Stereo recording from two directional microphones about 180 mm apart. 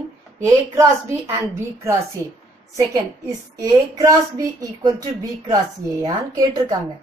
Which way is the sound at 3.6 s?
20° right (ahead or behind).